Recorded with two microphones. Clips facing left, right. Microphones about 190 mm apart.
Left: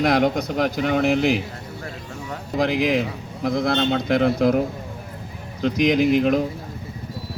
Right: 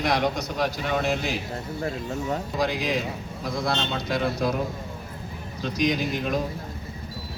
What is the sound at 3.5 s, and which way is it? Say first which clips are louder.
Speech: left 7 dB; 55° left (ahead or behind).